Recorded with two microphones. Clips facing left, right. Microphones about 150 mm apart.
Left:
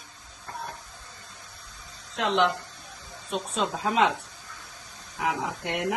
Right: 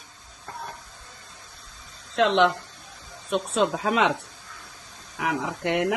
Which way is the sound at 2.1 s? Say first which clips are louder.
Right 5 dB; 75° right (ahead or behind).